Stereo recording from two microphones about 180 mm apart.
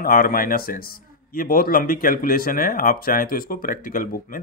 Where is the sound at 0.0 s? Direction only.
50° left (ahead or behind).